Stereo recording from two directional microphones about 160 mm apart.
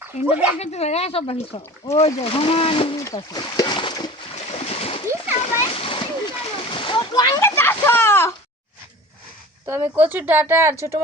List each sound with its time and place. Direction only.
0.1 s speech: 50° left (ahead or behind); by 4.1 s 30° left (ahead or behind)
4.4 s splash: 40° left (ahead or behind); by 8.3 s 15° left (ahead or behind)
9.6 s speech: 15° right (ahead or behind)